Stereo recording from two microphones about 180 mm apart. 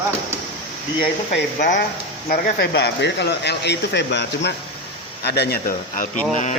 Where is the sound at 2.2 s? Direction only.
55° left (ahead or behind).